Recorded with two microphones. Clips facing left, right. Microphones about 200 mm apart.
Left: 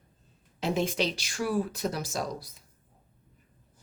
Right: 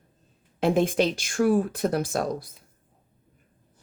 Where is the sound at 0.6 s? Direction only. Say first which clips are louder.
Right 7 dB; 55° right (ahead or behind).